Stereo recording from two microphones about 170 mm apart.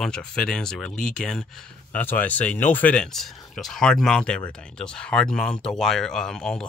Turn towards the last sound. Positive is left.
turn(degrees=5)  # may be behind; listen again after turning